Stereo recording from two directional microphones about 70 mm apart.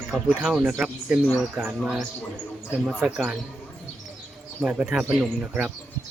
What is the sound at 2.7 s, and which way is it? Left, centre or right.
Speech, centre.